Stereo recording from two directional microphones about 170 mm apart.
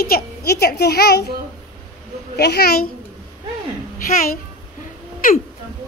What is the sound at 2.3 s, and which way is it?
Speech, 70° left (ahead or behind).